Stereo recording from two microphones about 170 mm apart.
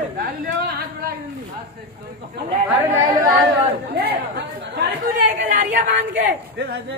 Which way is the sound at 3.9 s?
65° right (ahead or behind).